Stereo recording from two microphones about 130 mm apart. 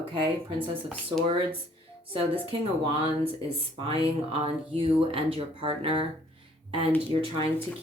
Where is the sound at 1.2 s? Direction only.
45° right (ahead or behind).